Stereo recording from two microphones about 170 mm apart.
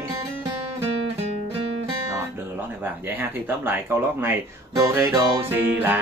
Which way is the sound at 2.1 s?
10° right (ahead or behind).